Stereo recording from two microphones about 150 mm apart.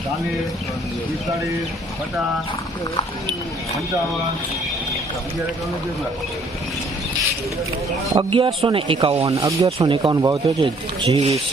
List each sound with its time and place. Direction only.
8.3 s speech: 35° right (ahead or behind)
9.2 s speech: 20° right (ahead or behind); by 11.3 s 40° right (ahead or behind)